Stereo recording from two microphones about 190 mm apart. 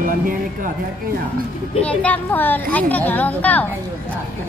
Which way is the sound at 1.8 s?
10° left (ahead or behind).